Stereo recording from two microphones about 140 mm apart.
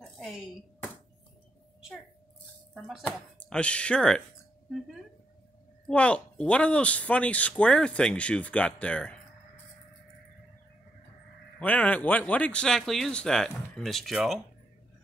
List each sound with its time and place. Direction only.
0.0 s a sound: centre (ahead or behind)
2.7 s speech: centre (ahead or behind)
5.9 s speech: 10° left (ahead or behind)
11.6 s speech: 10° left (ahead or behind)